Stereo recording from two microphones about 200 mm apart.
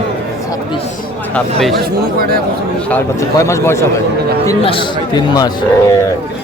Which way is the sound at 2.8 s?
10° left (ahead or behind).